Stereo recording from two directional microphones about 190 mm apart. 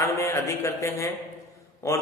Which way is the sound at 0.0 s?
15° left (ahead or behind).